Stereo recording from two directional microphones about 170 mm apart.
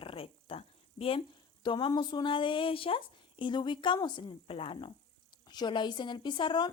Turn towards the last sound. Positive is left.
turn(degrees=25)  # may be behind; listen again after turning